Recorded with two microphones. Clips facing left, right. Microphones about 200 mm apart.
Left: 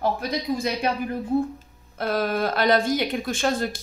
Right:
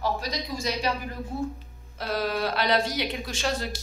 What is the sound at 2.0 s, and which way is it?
A woman's voice, 55° left (ahead or behind).